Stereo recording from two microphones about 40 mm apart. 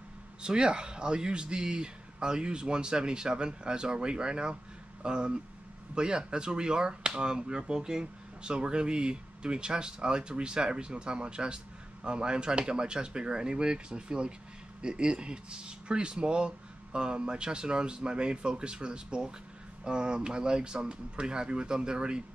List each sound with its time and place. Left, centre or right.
0.4 s speech: right